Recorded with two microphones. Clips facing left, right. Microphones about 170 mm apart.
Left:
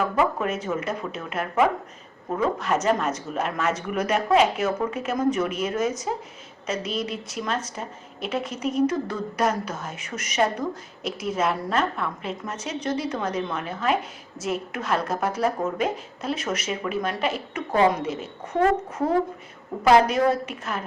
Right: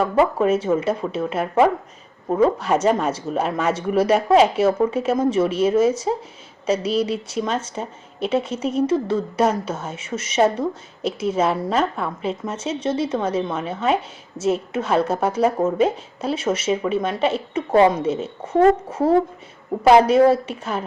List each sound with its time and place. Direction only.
0.0 s a woman's voice: 30° right (ahead or behind)